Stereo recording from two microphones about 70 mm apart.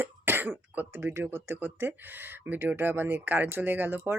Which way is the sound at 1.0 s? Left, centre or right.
Right.